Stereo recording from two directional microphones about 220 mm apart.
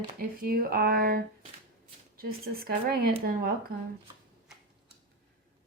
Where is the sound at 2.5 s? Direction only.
40° right (ahead or behind).